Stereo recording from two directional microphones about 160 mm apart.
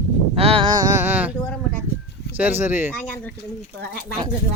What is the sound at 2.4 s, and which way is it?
Speech, 15° right (ahead or behind).